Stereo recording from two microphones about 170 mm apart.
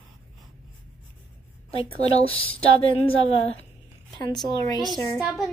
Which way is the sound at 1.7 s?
35° left (ahead or behind).